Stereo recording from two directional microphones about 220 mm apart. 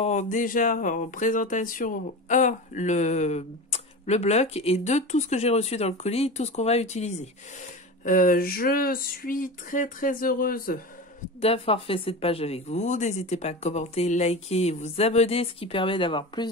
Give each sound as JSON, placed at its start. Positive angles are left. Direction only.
{"t": 0.0, "sound": "speech", "side_deg": 35}
{"t": 11.4, "sound": "speech", "side_deg": 25}